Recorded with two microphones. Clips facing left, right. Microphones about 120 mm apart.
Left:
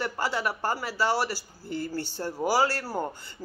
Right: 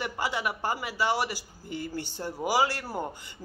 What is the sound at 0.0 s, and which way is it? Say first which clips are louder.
Speech: left 2 dB; 15° right (ahead or behind).